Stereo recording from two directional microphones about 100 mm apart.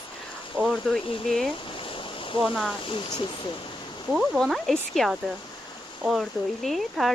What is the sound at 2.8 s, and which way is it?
Speech, 55° left (ahead or behind).